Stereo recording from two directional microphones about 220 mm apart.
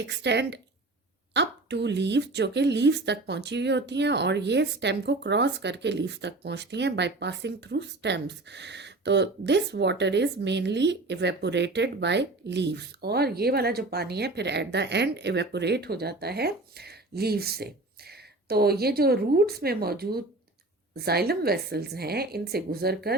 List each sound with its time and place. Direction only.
0.0 s speech: 50° right (ahead or behind)